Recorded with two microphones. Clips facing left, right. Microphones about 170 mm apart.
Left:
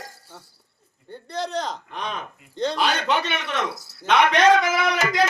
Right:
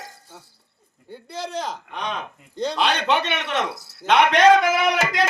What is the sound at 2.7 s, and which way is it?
Speech, 5° left (ahead or behind).